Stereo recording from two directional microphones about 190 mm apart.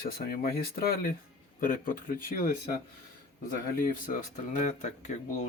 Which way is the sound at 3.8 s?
45° left (ahead or behind).